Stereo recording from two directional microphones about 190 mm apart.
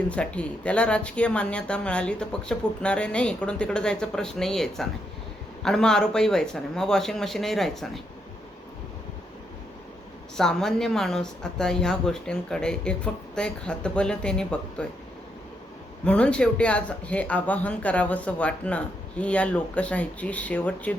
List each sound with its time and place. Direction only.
0.1 s speech: 5° left (ahead or behind)
10.3 s speech: centre (ahead or behind)
16.0 s speech: 5° left (ahead or behind)